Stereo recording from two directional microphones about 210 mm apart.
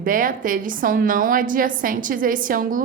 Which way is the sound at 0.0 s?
40° right (ahead or behind).